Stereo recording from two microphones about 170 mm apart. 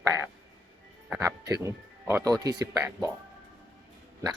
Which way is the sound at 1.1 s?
15° right (ahead or behind).